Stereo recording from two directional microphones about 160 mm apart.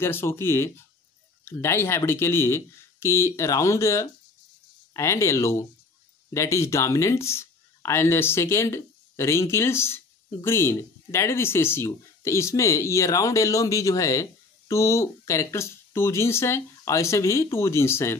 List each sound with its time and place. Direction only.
0.0 s speech: 15° left (ahead or behind)